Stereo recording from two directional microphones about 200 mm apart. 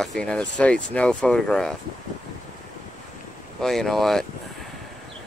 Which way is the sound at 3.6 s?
Centre (ahead or behind).